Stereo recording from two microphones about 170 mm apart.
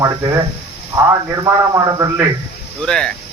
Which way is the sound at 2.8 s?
5° left (ahead or behind).